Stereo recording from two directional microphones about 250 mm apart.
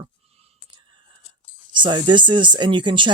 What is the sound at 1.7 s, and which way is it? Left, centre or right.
Speech, centre.